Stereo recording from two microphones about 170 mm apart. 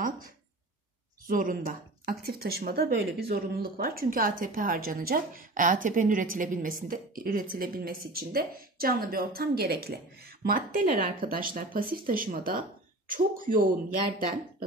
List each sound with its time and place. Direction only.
1.2 s speech: 55° right (ahead or behind)